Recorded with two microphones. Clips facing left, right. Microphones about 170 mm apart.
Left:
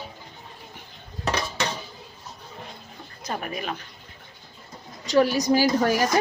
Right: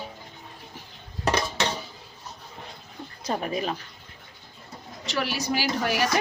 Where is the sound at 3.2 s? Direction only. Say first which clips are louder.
Right 3 dB; 30° right (ahead or behind).